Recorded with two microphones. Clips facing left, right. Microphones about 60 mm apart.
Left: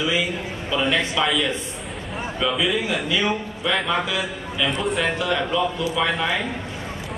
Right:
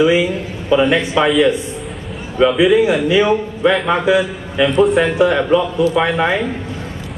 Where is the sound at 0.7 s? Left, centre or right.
Right.